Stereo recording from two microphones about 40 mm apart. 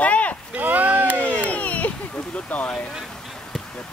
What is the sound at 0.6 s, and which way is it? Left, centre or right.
Speech, right.